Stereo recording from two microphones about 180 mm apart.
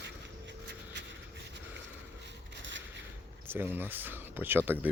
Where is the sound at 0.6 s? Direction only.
75° right (ahead or behind).